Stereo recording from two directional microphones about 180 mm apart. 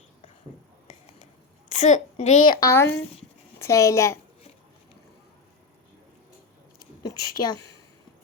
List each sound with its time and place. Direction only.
1.7 s a child's voice: 40° left (ahead or behind)
2.4 s a woman's voice: 20° left (ahead or behind)
6.7 s a sound: 25° left (ahead or behind)